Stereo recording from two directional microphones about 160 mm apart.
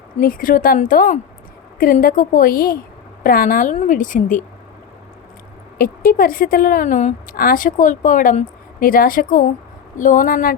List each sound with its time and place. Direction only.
0.2 s a woman's voice: 60° left (ahead or behind)
5.7 s a woman's voice: 65° left (ahead or behind)